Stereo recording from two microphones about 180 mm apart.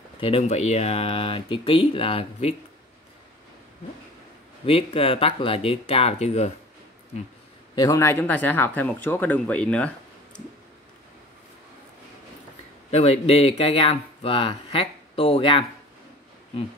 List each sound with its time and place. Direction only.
0.2 s speech: 35° left (ahead or behind)
4.6 s speech: 30° left (ahead or behind)
7.7 s speech: 20° left (ahead or behind)
12.9 s speech: 35° left (ahead or behind)